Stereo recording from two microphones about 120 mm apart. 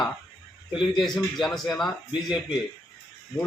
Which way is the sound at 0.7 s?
40° left (ahead or behind).